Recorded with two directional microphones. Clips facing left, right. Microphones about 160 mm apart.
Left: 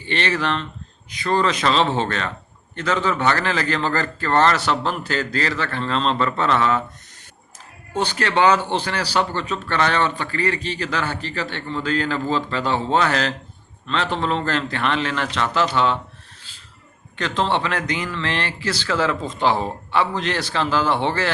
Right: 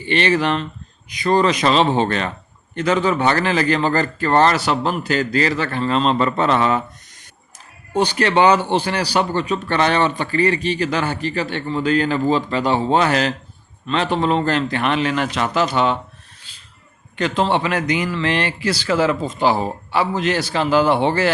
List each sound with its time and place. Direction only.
0.0 s a man's voice: 15° right (ahead or behind)
7.9 s a man's voice: 15° right (ahead or behind)
17.2 s a man's voice: 10° right (ahead or behind)